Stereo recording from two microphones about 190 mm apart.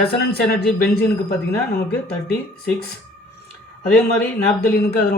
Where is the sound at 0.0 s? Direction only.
55° left (ahead or behind).